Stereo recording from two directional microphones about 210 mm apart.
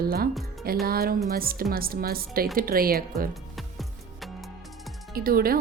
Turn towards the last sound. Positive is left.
turn(degrees=-45)  # may be behind; listen again after turning